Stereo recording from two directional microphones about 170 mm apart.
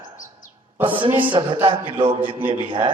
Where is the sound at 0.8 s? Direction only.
30° right (ahead or behind).